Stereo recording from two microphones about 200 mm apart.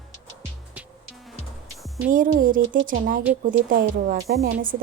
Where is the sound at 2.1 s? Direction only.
45° right (ahead or behind).